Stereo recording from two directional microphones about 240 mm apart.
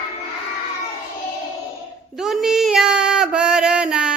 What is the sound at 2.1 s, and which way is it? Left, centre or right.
Female singing, centre.